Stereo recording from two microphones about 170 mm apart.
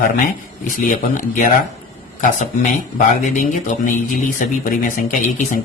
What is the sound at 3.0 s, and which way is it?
Speech, 50° left (ahead or behind).